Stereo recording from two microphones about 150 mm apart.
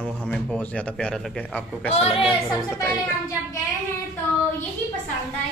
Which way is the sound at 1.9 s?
40° left (ahead or behind).